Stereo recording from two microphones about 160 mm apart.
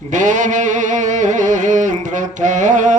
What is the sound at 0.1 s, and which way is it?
Music, 50° right (ahead or behind).